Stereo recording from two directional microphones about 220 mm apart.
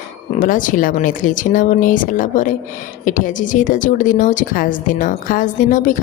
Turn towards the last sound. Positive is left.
turn(degrees=35)  # may be behind; listen again after turning